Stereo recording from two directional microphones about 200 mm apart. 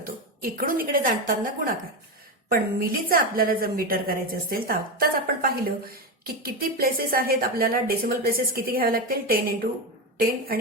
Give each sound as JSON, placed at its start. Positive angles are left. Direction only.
{"t": 0.0, "sound": "a woman's voice", "side_deg": -45}